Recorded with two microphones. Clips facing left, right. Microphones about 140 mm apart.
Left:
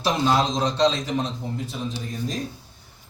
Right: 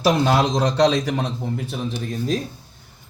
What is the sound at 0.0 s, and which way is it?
A man's voice, 70° right (ahead or behind).